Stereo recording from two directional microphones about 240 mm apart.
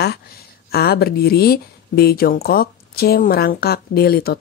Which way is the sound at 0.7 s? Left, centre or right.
Left.